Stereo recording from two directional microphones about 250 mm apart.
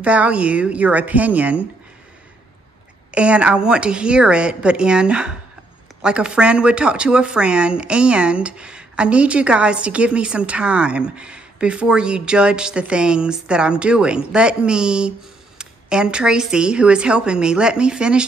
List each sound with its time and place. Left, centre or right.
0.0 s speech: centre
3.2 s speech: centre